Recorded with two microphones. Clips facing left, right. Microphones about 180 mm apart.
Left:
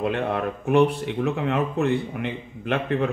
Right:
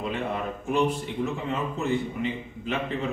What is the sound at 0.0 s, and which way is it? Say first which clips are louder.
Speech: left 5 dB; 65° left (ahead or behind).